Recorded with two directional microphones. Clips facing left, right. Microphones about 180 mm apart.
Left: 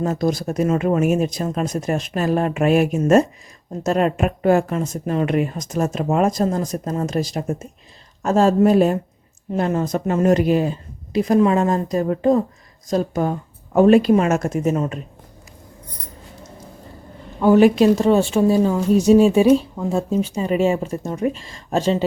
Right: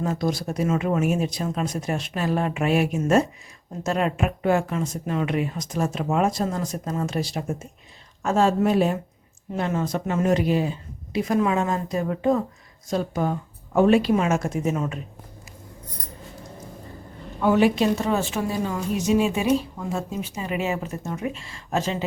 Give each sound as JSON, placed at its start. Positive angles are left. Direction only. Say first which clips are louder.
{"t": 0.0, "sound": "speech", "louder": "left 5 dB", "side_deg": 45}
{"t": 17.4, "sound": "speech", "louder": "left 6 dB", "side_deg": 40}